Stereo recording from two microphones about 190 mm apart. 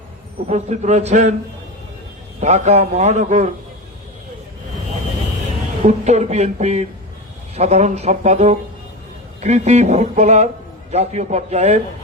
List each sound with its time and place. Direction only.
0.4 s speech: 35° right (ahead or behind)
2.4 s speech: 35° right (ahead or behind)
5.8 s speech: 35° right (ahead or behind)